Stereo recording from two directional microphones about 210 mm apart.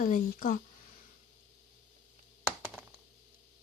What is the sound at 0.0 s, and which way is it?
Speech, 40° left (ahead or behind).